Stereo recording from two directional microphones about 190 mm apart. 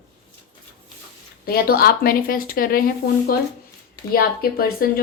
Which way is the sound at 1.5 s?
55° left (ahead or behind).